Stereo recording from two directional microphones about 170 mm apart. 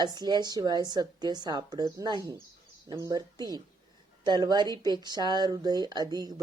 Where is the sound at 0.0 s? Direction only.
25° right (ahead or behind).